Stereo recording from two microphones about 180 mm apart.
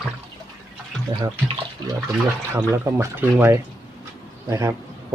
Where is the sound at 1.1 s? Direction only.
25° right (ahead or behind).